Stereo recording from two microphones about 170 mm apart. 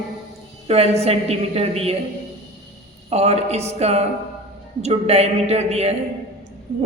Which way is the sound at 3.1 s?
40° right (ahead or behind).